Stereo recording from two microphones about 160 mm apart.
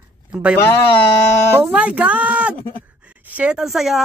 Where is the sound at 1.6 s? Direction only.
10° right (ahead or behind).